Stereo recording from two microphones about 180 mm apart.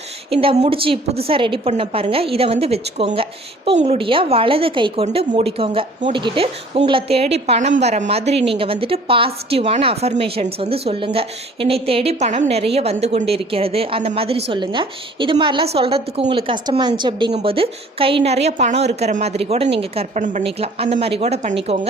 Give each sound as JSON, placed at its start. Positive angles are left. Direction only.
{"t": 0.4, "sound": "a woman's voice", "side_deg": -35}